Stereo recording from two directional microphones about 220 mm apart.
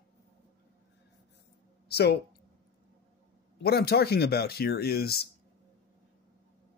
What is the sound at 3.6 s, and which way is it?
Speech, 45° left (ahead or behind).